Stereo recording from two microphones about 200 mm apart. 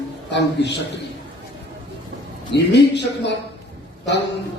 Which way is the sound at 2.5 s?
60° left (ahead or behind).